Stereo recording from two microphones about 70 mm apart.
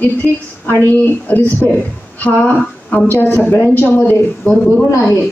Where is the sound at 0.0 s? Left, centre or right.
Left.